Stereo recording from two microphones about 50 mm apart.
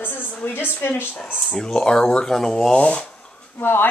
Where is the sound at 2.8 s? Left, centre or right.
Left.